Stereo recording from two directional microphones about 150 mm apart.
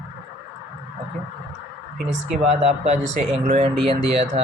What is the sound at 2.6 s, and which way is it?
Speech, 50° right (ahead or behind).